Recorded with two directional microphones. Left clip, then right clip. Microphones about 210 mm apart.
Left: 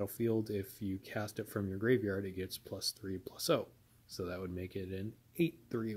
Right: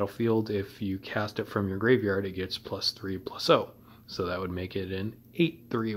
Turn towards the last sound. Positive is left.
turn(degrees=30)  # may be behind; listen again after turning